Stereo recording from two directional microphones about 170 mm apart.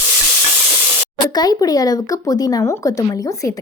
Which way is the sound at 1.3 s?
25° left (ahead or behind).